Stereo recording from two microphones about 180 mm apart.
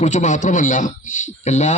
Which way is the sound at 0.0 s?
40° left (ahead or behind).